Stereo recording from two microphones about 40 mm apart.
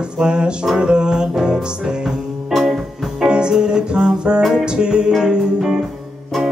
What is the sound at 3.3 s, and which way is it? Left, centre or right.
Music, right.